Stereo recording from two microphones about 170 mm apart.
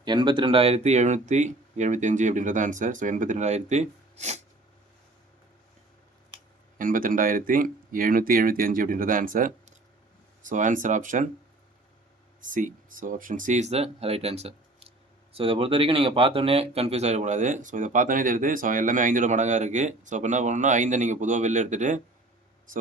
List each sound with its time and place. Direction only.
0.0 s speech: 25° right (ahead or behind); by 4.4 s 45° right (ahead or behind)
6.7 s speech: 50° right (ahead or behind)
12.4 s speech: 50° right (ahead or behind)